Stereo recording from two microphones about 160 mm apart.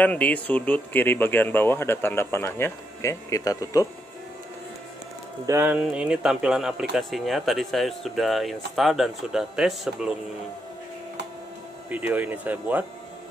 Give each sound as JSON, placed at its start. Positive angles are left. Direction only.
{"t": 0.0, "sound": "speech", "side_deg": 10}
{"t": 5.5, "sound": "speech", "side_deg": -10}
{"t": 11.9, "sound": "speech", "side_deg": -10}